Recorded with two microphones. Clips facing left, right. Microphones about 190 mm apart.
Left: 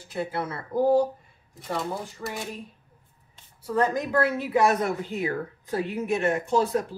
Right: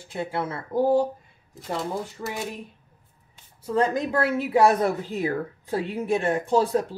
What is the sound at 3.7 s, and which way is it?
A woman's voice, 30° right (ahead or behind).